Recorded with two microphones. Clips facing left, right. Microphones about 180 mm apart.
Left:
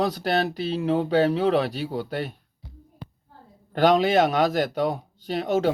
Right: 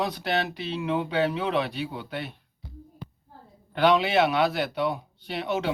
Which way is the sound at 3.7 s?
40° left (ahead or behind).